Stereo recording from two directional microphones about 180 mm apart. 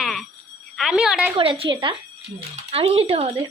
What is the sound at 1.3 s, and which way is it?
Speech, 30° right (ahead or behind).